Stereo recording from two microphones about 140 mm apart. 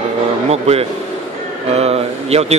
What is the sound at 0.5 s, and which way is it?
Speech, 50° right (ahead or behind).